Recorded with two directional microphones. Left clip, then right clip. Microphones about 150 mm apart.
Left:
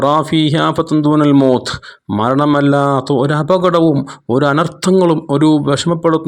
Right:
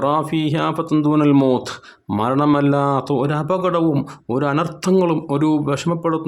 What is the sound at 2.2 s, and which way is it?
Speech, 35° left (ahead or behind).